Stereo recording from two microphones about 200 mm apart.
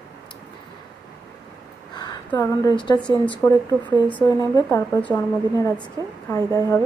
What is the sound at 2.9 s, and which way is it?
Speech, 5° left (ahead or behind).